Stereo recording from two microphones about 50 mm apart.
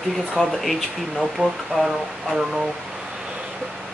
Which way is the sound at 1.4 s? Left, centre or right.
Centre.